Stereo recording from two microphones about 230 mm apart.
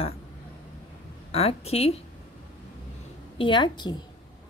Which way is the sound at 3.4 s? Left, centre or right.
Centre.